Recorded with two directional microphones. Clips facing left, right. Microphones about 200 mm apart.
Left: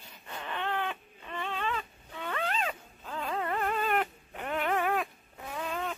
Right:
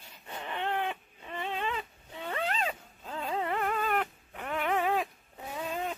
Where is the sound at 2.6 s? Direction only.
30° right (ahead or behind).